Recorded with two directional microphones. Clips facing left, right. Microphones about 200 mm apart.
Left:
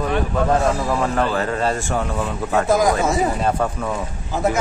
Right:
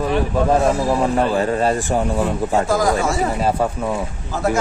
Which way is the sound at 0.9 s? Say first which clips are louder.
Right 3 dB; 15° right (ahead or behind).